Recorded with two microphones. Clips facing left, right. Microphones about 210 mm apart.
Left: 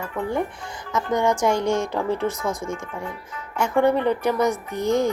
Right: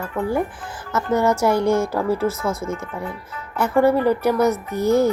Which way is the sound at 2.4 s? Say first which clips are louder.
Right 2 dB; 15° left (ahead or behind).